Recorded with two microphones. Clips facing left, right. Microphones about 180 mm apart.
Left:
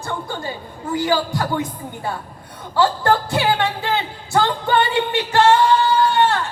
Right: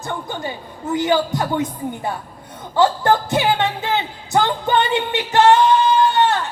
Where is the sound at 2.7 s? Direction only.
20° right (ahead or behind).